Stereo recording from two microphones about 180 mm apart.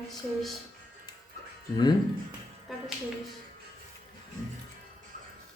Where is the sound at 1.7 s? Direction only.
25° left (ahead or behind).